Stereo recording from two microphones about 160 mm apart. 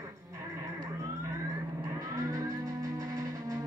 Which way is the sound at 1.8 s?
20° right (ahead or behind).